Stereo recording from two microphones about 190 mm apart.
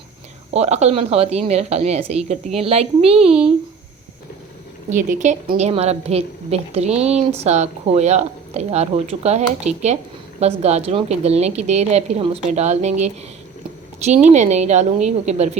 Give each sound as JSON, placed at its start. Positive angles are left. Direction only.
{"t": 0.5, "sound": "a woman's voice", "side_deg": -35}
{"t": 4.9, "sound": "a woman's voice", "side_deg": -40}